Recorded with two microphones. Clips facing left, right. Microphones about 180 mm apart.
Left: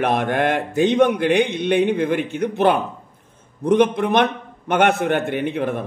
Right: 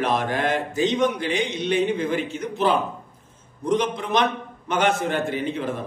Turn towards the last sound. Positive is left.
turn(degrees=60)  # may be behind; listen again after turning